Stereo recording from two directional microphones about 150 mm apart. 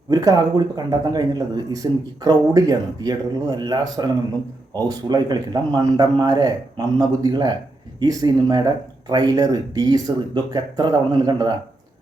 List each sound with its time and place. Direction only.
0.1 s a man's voice: 25° right (ahead or behind)